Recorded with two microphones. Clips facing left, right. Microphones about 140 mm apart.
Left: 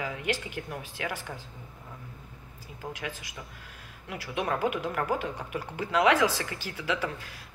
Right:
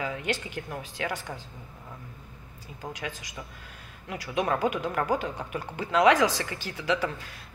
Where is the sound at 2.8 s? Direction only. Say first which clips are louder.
Right 1 dB; 5° left (ahead or behind).